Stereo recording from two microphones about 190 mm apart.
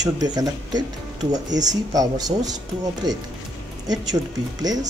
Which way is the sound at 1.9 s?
20° right (ahead or behind).